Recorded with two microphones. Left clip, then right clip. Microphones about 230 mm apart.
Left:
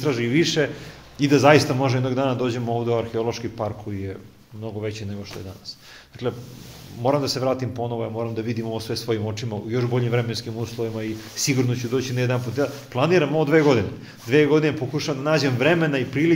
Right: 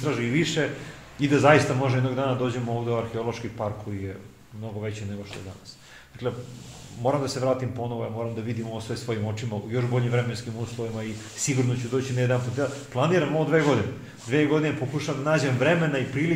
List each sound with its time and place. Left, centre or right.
0.0 s speech: left
6.2 s speech: left